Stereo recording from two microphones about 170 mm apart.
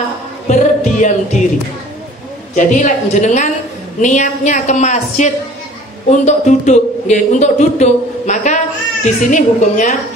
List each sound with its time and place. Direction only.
0.5 s speech: 45° left (ahead or behind)
2.5 s speech: 45° left (ahead or behind)